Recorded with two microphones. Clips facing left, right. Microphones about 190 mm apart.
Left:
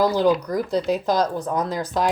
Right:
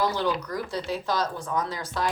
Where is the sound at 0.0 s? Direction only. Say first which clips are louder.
Left 8 dB; 40° left (ahead or behind).